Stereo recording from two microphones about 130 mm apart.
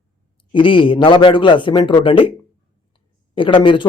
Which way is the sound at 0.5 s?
40° left (ahead or behind).